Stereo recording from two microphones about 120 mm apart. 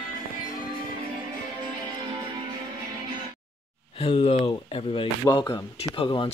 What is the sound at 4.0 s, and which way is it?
Speech, 50° left (ahead or behind).